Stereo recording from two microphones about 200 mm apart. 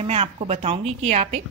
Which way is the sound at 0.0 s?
30° right (ahead or behind).